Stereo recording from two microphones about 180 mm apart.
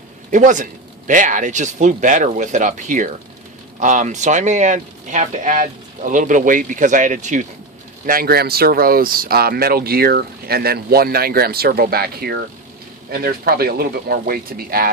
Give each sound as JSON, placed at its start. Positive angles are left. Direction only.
{"t": 0.3, "sound": "speech", "side_deg": -45}
{"t": 8.0, "sound": "speech", "side_deg": -55}